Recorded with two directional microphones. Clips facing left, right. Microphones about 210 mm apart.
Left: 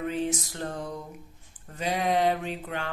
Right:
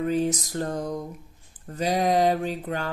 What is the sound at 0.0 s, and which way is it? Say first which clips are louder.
A woman's voice: right 5 dB; 40° right (ahead or behind).